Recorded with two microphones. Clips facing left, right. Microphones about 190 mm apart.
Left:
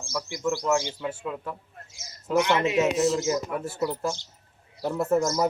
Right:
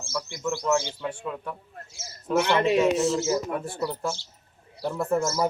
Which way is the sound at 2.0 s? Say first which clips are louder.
Even; 15° left (ahead or behind).